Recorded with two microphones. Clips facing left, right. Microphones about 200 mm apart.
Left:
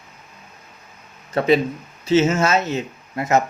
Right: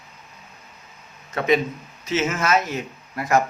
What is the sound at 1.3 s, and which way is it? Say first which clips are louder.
Speech: left 3 dB; 30° left (ahead or behind).